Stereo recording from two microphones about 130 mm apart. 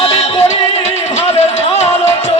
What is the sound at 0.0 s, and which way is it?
Music, 55° left (ahead or behind).